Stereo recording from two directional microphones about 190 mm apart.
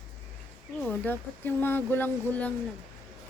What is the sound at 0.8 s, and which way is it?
Speech, 10° left (ahead or behind).